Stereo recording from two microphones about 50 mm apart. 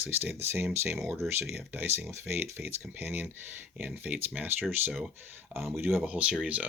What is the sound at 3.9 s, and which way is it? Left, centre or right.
Speech, right.